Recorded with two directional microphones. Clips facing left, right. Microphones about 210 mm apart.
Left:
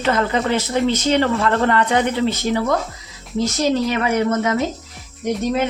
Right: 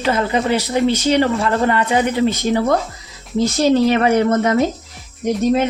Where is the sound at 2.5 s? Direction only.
30° right (ahead or behind).